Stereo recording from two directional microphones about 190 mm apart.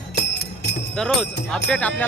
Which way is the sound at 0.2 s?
55° left (ahead or behind).